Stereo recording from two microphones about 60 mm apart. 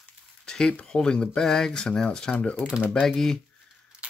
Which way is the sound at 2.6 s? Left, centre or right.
Centre.